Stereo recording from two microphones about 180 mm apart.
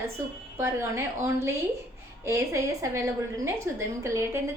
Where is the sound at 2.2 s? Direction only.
15° right (ahead or behind).